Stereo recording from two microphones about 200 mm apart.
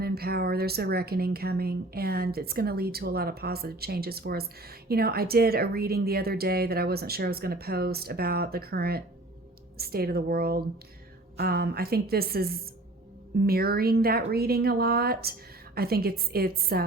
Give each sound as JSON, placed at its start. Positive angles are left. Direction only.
{"t": 0.0, "sound": "speech", "side_deg": -50}